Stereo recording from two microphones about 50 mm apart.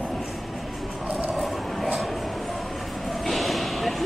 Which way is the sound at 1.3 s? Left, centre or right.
Centre.